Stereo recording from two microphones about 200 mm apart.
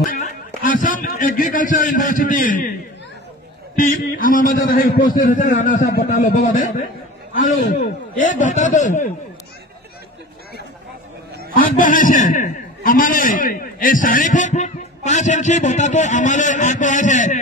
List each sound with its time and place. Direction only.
0.0 s a sound: 45° left (ahead or behind)
0.6 s a man's voice: 40° left (ahead or behind)
3.7 s a man's voice: 45° left (ahead or behind)
11.3 s a man's voice: 45° left (ahead or behind)